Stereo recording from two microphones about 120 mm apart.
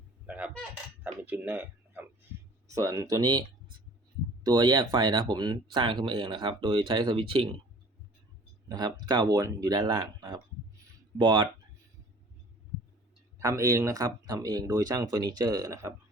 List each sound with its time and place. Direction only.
0.3 s a sound: 15° right (ahead or behind)
2.6 s speech: 25° right (ahead or behind); by 7.4 s 50° right (ahead or behind)
8.7 s speech: 35° right (ahead or behind)
13.4 s speech: 25° right (ahead or behind)